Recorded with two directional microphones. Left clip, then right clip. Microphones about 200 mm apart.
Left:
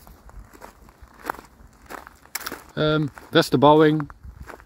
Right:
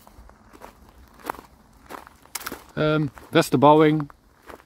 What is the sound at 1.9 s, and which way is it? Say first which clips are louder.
Walk: left 1 dB; 10° left (ahead or behind).